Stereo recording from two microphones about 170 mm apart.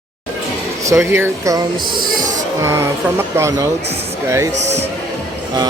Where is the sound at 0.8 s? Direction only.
15° right (ahead or behind).